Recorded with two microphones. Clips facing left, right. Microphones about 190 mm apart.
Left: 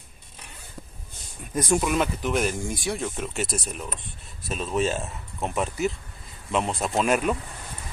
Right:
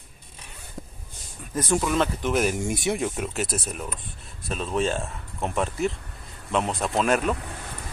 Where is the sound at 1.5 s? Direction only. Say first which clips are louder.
Left 1 dB; 15° left (ahead or behind).